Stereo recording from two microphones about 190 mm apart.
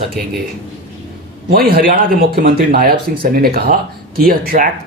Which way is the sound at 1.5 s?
50° right (ahead or behind).